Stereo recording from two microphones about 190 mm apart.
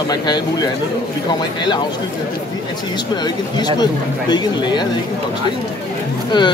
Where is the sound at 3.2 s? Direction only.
20° left (ahead or behind).